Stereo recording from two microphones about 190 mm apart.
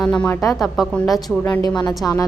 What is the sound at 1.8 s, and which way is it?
Speech, 20° left (ahead or behind).